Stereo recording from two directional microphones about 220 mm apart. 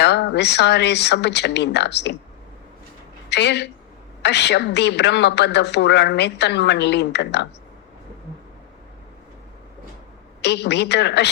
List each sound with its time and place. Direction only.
0.0 s a woman's voice: 50° left (ahead or behind)
3.2 s a woman's voice: 50° left (ahead or behind)
10.4 s a woman's voice: 50° left (ahead or behind)